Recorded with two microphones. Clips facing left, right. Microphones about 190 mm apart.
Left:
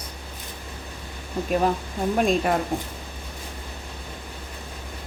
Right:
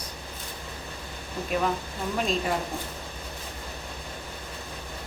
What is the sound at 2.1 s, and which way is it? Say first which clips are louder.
Speech: left 6 dB; 50° left (ahead or behind).